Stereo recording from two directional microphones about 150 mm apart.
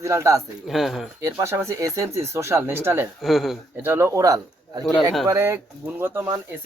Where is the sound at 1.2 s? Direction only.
20° right (ahead or behind).